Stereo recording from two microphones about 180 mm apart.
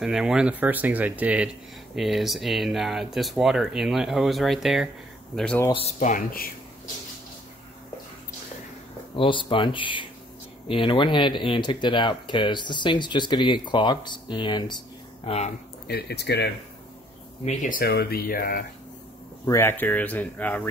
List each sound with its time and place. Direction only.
0.0 s speech: centre (ahead or behind)
5.7 s speech: 35° left (ahead or behind); by 6.5 s 50° left (ahead or behind)
9.1 s speech: 30° left (ahead or behind)
15.9 s speech: 65° left (ahead or behind)
17.5 s speech: 50° left (ahead or behind)
19.4 s speech: 15° left (ahead or behind)